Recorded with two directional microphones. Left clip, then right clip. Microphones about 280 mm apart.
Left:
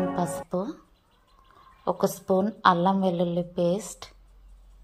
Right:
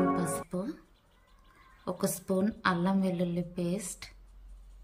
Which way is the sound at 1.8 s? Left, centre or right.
Centre.